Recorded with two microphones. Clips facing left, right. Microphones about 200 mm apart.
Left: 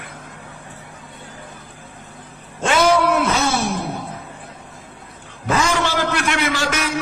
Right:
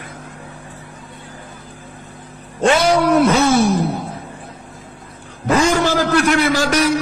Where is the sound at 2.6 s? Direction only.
40° right (ahead or behind).